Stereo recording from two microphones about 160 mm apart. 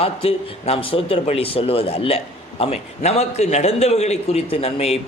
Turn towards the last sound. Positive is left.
turn(degrees=40)  # may be behind; listen again after turning